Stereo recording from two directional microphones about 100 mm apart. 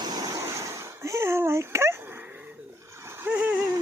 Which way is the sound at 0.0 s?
40° right (ahead or behind).